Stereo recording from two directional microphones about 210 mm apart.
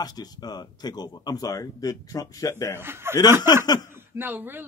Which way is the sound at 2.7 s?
10° right (ahead or behind).